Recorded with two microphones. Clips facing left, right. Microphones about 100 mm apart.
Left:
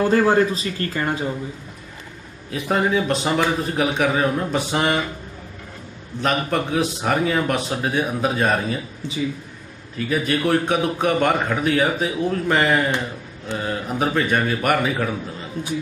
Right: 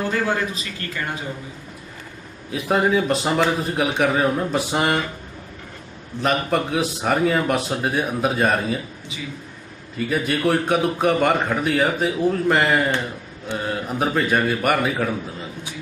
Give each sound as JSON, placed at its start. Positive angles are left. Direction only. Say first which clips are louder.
{"t": 0.1, "sound": "speech", "louder": "left 6 dB", "side_deg": 35}
{"t": 2.5, "sound": "a man's voice", "louder": "right 1 dB", "side_deg": 0}
{"t": 6.2, "sound": "a man's voice", "louder": "right 1 dB", "side_deg": 0}
{"t": 9.9, "sound": "a man's voice", "louder": "left 1 dB", "side_deg": 0}